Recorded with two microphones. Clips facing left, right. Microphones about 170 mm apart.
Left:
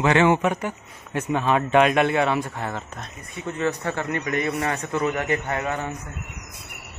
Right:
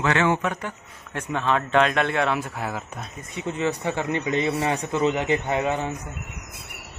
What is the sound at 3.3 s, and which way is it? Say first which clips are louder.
A man's voice: even; 20° right (ahead or behind).